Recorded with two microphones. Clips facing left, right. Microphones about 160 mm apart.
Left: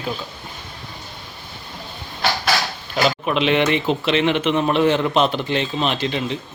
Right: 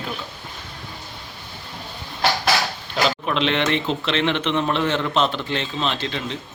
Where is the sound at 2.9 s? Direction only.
10° left (ahead or behind).